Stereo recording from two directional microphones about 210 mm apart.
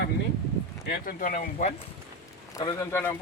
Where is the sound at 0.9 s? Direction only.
40° left (ahead or behind).